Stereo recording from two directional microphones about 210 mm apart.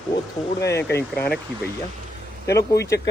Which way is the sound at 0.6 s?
50° left (ahead or behind).